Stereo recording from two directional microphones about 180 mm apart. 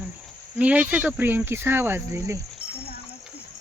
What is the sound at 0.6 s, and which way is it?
Speech, 10° right (ahead or behind).